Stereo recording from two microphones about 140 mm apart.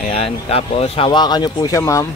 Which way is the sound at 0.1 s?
45° left (ahead or behind).